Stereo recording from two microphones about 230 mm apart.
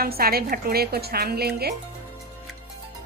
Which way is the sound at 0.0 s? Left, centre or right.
Right.